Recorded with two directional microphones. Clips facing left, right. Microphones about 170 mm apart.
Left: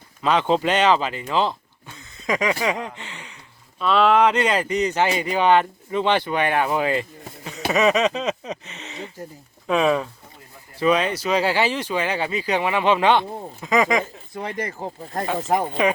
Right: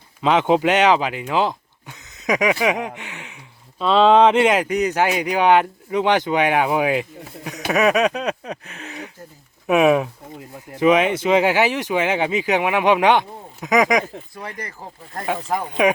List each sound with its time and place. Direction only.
0.2 s speech: 20° right (ahead or behind)
7.7 s a sound: 10° right (ahead or behind)
9.6 s speech: 10° right (ahead or behind)
14.3 s speech: 25° left (ahead or behind)